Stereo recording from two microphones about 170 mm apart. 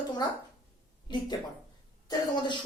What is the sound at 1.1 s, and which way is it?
Speech, 25° left (ahead or behind).